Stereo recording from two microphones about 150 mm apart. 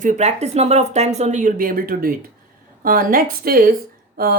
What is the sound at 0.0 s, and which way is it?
Speech, 55° right (ahead or behind).